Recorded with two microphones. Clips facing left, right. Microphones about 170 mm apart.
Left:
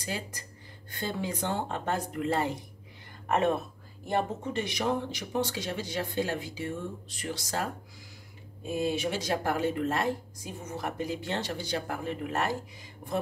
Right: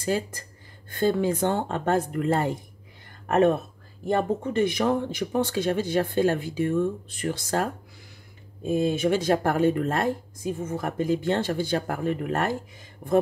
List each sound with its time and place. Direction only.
0.0 s a woman's voice: 50° right (ahead or behind)
9.0 s speech: 55° right (ahead or behind)
13.0 s a sound: 55° right (ahead or behind)